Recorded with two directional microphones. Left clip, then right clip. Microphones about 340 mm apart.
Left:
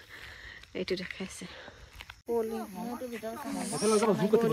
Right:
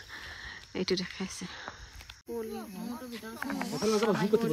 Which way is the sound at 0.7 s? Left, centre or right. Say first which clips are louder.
Right 2 dB; centre.